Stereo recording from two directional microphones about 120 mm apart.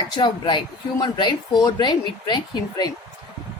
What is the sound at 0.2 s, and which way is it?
Speech, 40° left (ahead or behind).